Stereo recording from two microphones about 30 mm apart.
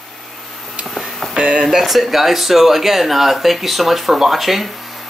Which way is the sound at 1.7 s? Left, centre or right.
Centre.